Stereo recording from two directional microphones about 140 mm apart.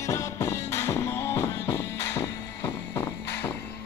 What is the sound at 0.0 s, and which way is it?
Music, 20° left (ahead or behind).